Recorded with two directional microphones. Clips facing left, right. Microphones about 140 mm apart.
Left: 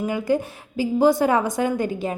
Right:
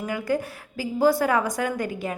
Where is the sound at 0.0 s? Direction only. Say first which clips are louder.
Left 4 dB; 20° left (ahead or behind).